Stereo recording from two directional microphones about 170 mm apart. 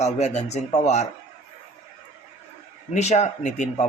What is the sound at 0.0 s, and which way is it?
A man's voice, 40° left (ahead or behind).